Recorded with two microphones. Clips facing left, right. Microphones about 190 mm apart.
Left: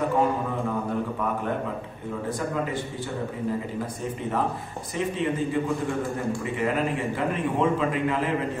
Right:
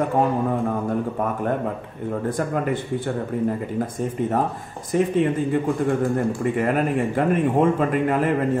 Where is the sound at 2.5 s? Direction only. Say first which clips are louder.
Right 5 dB; 55° right (ahead or behind).